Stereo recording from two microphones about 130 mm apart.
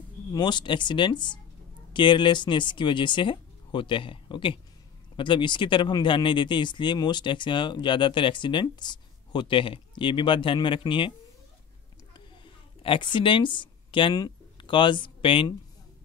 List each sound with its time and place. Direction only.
0.3 s speech: 35° left (ahead or behind)
12.8 s speech: 40° left (ahead or behind)